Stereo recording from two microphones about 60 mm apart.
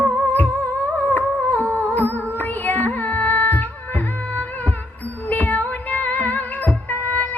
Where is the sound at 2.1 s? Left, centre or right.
Left.